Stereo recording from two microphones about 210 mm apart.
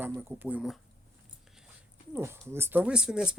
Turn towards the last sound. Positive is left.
turn(degrees=-5)  # may be behind; listen again after turning